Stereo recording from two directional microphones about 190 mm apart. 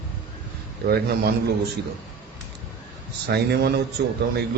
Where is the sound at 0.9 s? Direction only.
55° right (ahead or behind).